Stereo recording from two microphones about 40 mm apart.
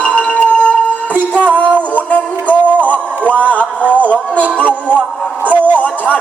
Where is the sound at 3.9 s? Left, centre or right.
Left.